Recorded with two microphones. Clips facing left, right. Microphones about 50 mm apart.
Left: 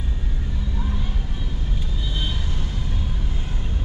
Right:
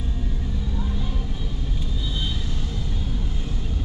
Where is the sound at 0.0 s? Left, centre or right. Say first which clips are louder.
Right 2 dB; left.